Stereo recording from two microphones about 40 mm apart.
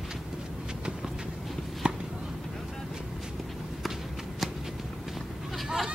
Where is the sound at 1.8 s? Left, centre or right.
Right.